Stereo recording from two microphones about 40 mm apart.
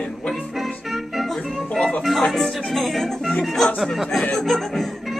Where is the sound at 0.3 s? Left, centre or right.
Centre.